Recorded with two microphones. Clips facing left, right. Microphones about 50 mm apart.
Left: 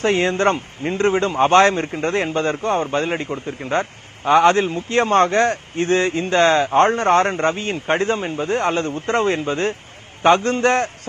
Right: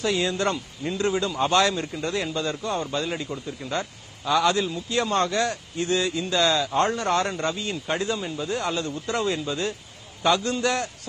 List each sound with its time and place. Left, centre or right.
0.0 s speech: left